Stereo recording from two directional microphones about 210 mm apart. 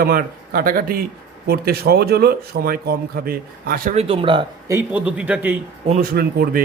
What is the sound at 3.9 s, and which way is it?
Speech, 30° right (ahead or behind).